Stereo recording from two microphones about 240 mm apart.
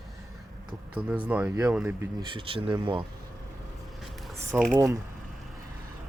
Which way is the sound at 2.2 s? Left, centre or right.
Right.